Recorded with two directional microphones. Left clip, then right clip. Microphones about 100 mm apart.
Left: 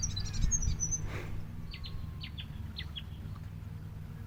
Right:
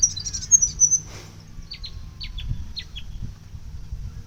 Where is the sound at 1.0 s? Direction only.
15° right (ahead or behind).